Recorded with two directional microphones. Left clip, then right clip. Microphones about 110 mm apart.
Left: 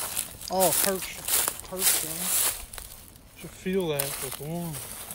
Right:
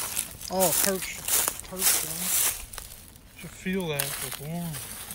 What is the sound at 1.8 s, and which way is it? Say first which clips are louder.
Speech: right 1 dB; 5° right (ahead or behind).